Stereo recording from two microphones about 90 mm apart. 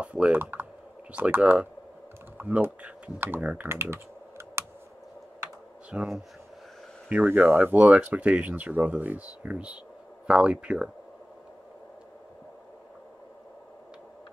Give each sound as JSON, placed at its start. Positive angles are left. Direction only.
{"t": 0.0, "sound": "speech", "side_deg": -15}
{"t": 5.9, "sound": "speech", "side_deg": -10}
{"t": 7.2, "sound": "speech", "side_deg": -20}